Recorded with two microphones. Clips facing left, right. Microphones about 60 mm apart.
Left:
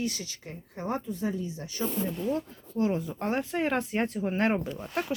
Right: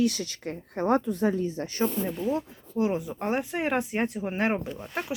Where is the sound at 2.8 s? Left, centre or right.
Centre.